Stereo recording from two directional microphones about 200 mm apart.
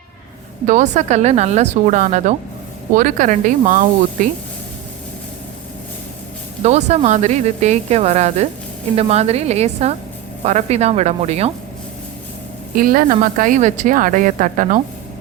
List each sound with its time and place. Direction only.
0.7 s a woman's voice: 35° right (ahead or behind)
6.6 s a woman's voice: 35° right (ahead or behind)
12.7 s a woman's voice: 45° right (ahead or behind)